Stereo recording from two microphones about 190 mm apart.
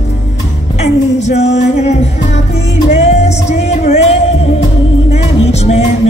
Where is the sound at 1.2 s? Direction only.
35° left (ahead or behind).